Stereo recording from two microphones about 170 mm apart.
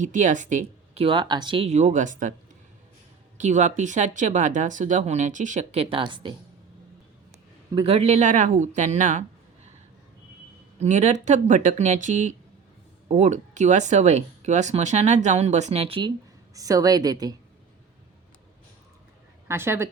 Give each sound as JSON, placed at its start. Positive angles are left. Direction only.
{"t": 0.0, "sound": "speech", "side_deg": -45}
{"t": 1.0, "sound": "speech", "side_deg": -30}
{"t": 3.3, "sound": "speech", "side_deg": -45}
{"t": 7.7, "sound": "speech", "side_deg": -30}
{"t": 10.8, "sound": "speech", "side_deg": -45}
{"t": 16.6, "sound": "a woman's voice", "side_deg": -20}
{"t": 19.5, "sound": "a woman's voice", "side_deg": -15}